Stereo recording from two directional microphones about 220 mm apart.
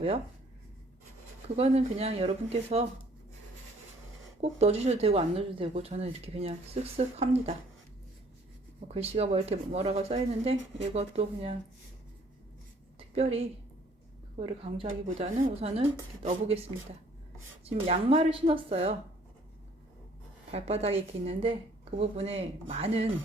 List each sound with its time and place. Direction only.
1.5 s speech: 30° right (ahead or behind)
4.4 s speech: 30° right (ahead or behind)
8.9 s speech: 30° right (ahead or behind)
13.1 s speech: 30° right (ahead or behind)
17.7 s speech: 25° right (ahead or behind)
20.5 s speech: 30° right (ahead or behind)